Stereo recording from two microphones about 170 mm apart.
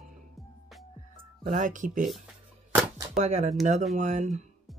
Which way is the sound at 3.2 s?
45° right (ahead or behind).